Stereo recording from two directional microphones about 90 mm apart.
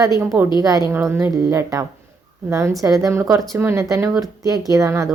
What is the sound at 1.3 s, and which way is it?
A woman's voice, 40° right (ahead or behind).